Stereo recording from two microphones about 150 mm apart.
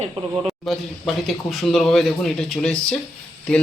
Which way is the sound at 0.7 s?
Centre (ahead or behind).